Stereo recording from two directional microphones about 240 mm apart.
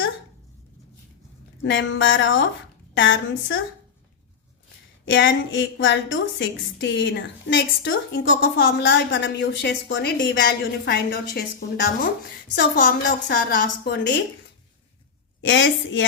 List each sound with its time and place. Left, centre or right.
1.6 s a woman's voice: left
5.0 s a woman's voice: left
15.4 s a woman's voice: left